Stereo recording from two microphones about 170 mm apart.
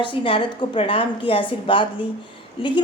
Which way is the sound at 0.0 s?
30° left (ahead or behind).